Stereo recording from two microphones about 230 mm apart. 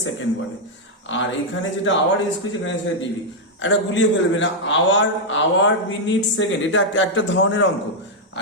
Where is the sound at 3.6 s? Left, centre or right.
Left.